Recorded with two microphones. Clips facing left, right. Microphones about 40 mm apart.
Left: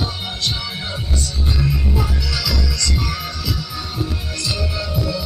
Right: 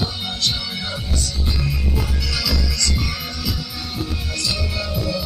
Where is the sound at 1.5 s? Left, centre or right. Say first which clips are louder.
Left 6 dB; left.